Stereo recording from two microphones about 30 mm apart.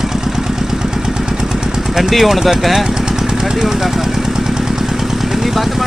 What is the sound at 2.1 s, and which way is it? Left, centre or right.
Speech, centre.